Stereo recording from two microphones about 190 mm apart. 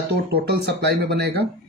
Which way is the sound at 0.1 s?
60° right (ahead or behind).